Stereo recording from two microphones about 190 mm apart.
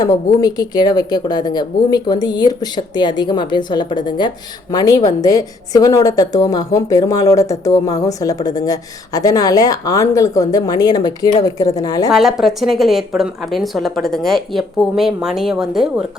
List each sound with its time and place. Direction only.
0.4 s a woman's voice: 20° left (ahead or behind)
12.1 s speech: centre (ahead or behind)